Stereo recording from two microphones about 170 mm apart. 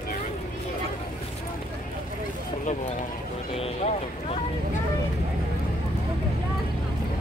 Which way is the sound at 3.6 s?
35° left (ahead or behind).